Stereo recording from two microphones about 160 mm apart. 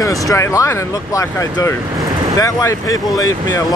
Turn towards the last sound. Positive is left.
turn(degrees=20)  # may be behind; listen again after turning